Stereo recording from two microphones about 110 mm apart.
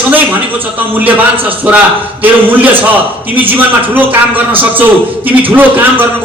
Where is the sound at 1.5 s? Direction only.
15° right (ahead or behind).